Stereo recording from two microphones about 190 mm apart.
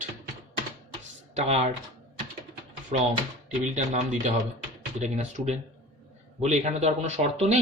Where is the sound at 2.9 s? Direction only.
40° right (ahead or behind).